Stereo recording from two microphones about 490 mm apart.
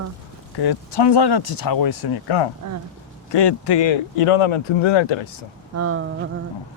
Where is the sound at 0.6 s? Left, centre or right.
Left.